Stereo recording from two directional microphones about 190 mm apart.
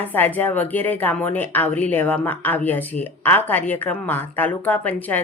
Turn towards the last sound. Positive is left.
turn(degrees=10)  # may be behind; listen again after turning